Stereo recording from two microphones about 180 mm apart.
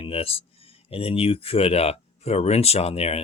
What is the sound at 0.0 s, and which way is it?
Speech, 30° left (ahead or behind).